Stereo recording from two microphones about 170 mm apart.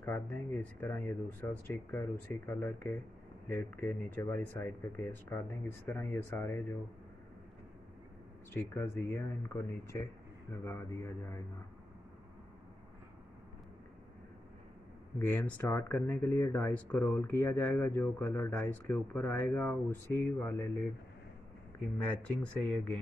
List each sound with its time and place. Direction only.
0.0 s speech: 10° left (ahead or behind)
8.7 s speech: 15° left (ahead or behind)
15.1 s speech: 10° left (ahead or behind)
21.9 s speech: 10° left (ahead or behind)